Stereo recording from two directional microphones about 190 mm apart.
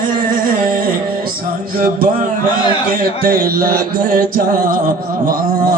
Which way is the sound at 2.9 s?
50° right (ahead or behind).